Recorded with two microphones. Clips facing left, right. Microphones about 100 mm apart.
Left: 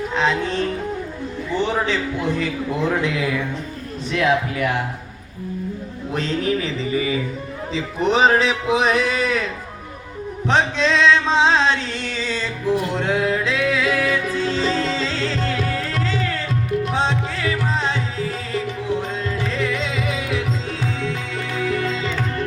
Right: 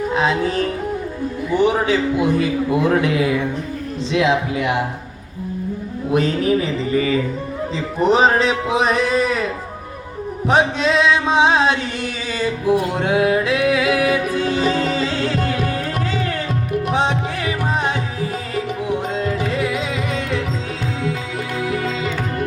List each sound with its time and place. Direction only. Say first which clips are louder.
0.1 s a man's voice: right 2 dB; 5° right (ahead or behind)
6.1 s a man's voice: right 5 dB; 10° right (ahead or behind)
6.9 s music: right 4 dB; 10° left (ahead or behind)
10.8 s music: even; 10° right (ahead or behind)